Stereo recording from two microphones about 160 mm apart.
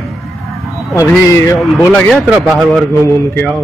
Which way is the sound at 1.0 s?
20° left (ahead or behind).